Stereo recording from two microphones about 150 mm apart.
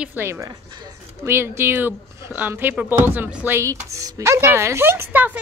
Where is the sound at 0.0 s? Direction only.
15° right (ahead or behind).